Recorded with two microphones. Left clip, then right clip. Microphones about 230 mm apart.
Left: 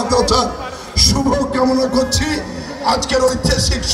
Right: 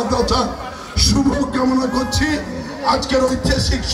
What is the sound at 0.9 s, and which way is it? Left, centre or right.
Music, left.